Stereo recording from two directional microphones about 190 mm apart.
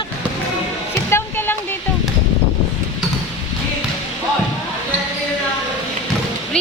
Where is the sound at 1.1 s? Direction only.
10° left (ahead or behind).